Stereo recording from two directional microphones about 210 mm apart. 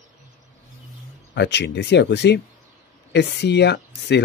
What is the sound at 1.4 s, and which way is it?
Speech, 55° left (ahead or behind).